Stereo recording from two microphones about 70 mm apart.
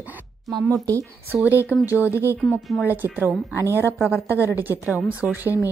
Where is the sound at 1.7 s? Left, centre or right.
Left.